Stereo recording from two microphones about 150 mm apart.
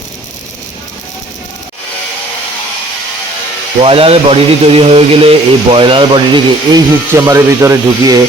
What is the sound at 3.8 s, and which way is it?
Speech, 40° right (ahead or behind).